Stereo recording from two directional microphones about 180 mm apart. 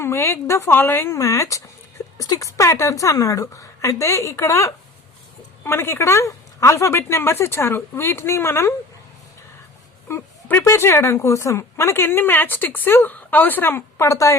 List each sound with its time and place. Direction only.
0.0 s a woman's voice: 15° left (ahead or behind)
10.1 s a woman's voice: 10° left (ahead or behind)